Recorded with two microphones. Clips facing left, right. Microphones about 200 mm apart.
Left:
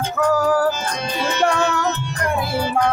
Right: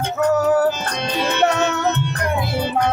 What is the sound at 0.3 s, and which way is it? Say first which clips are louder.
Music: right 2 dB; 25° right (ahead or behind).